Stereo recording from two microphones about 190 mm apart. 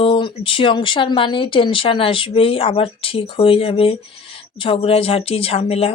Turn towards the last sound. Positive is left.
turn(degrees=30)  # may be behind; listen again after turning